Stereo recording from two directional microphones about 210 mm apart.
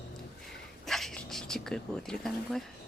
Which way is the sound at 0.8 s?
Centre (ahead or behind).